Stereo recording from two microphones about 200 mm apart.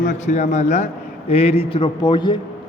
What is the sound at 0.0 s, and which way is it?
A man's voice, 35° left (ahead or behind).